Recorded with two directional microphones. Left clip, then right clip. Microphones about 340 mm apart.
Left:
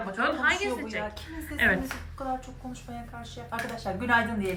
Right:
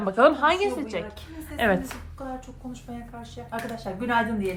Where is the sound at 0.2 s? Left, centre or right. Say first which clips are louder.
Right 10 dB; right.